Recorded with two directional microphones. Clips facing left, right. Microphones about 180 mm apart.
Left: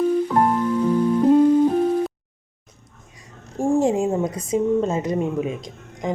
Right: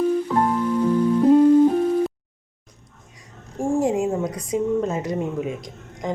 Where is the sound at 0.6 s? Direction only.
10° right (ahead or behind).